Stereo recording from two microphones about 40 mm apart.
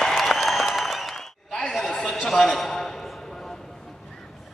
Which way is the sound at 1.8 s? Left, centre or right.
Centre.